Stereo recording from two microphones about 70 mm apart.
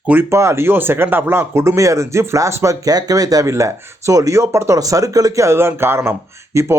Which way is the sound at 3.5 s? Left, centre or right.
Right.